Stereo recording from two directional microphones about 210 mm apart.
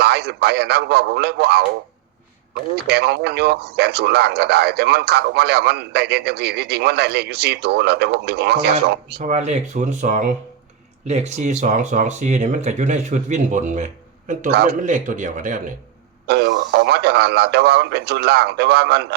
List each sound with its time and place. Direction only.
0.0 s speech: 50° right (ahead or behind)
2.8 s speech: 50° right (ahead or behind)
9.2 s speech: 35° right (ahead or behind)
16.2 s speech: 50° right (ahead or behind)